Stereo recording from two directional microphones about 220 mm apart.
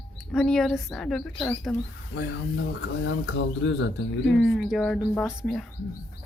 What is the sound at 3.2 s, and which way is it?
Speech, 55° left (ahead or behind).